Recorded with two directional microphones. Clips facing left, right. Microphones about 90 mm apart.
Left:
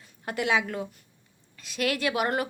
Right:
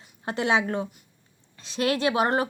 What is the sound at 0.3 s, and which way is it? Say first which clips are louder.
A woman's voice: right 3 dB; 30° right (ahead or behind).